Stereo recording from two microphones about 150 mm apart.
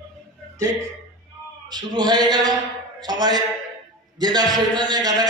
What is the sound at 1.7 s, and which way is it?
A man's voice, 30° right (ahead or behind).